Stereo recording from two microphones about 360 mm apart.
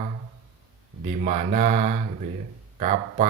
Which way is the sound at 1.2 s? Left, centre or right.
Centre.